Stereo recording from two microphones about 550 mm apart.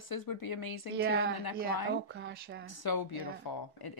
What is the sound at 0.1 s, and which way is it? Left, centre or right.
Speech, left.